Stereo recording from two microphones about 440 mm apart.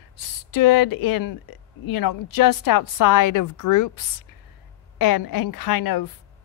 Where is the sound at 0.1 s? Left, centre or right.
Left.